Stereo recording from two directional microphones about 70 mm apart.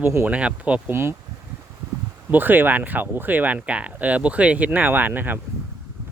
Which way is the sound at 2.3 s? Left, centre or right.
Right.